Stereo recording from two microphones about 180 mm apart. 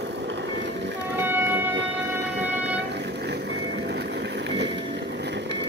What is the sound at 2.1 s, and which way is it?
Music, 70° right (ahead or behind).